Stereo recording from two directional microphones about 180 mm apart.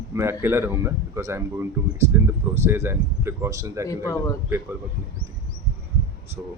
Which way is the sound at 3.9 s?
20° left (ahead or behind).